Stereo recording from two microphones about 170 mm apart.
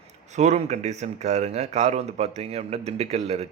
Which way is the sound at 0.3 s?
40° right (ahead or behind).